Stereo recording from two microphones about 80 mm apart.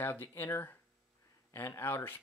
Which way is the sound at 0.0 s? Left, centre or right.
Left.